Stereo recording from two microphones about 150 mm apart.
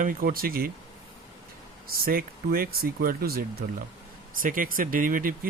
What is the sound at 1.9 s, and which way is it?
Speech, 85° right.